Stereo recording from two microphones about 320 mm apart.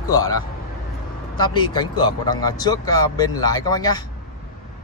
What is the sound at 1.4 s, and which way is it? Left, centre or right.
Speech, centre.